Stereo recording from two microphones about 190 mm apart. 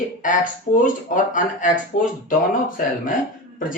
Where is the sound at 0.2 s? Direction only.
45° left (ahead or behind).